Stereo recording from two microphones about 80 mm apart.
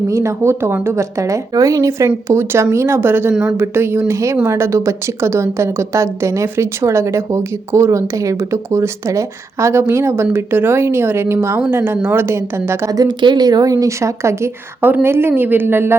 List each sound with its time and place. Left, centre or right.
0.1 s speech: right
2.0 s a woman's voice: right
13.1 s speech: right
14.8 s a woman's voice: right